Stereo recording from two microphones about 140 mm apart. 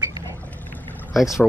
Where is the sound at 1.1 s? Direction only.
5° right (ahead or behind).